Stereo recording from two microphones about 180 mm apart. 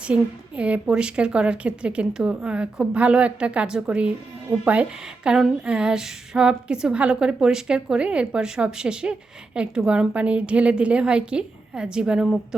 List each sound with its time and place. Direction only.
0.0 s a woman's voice: 5° right (ahead or behind)